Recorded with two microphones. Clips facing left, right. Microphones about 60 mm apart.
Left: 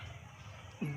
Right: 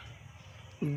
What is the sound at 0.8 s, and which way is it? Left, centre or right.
Speech, centre.